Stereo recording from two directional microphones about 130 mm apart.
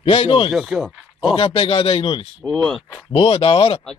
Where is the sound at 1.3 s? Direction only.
45° left (ahead or behind).